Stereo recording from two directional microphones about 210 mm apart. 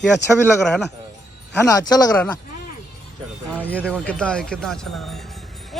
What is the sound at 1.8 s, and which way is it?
Speech, 15° left (ahead or behind).